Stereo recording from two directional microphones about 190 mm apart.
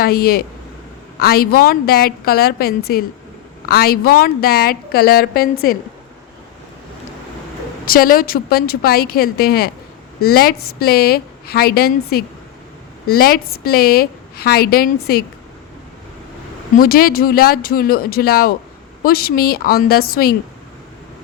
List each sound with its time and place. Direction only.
0.0 s a woman's voice: 55° left (ahead or behind)
7.9 s a woman's voice: 50° left (ahead or behind)
16.7 s a woman's voice: 50° left (ahead or behind)